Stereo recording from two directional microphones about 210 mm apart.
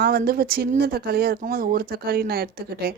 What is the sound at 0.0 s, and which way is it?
A woman's voice, 45° right (ahead or behind).